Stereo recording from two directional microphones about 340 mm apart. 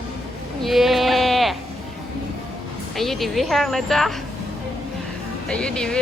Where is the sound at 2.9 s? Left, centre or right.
Centre.